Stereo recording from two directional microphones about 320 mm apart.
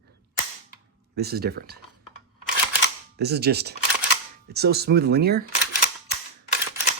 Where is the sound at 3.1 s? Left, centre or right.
Right.